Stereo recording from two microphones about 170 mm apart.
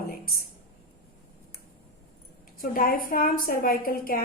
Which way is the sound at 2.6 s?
55° left (ahead or behind).